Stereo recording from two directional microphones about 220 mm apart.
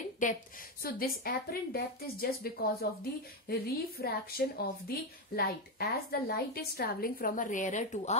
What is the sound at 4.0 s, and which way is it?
A woman's voice, 45° left (ahead or behind).